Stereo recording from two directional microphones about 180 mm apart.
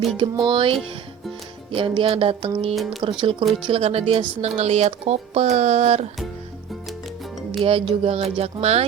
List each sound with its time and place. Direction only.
0.4 s a woman's voice: 30° right (ahead or behind)
7.6 s a woman's voice: 30° right (ahead or behind)